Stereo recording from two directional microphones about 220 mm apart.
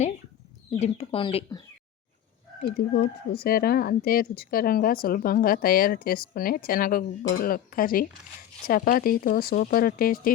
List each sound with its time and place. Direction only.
0.7 s speech: 30° left (ahead or behind)
2.7 s speech: 45° left (ahead or behind)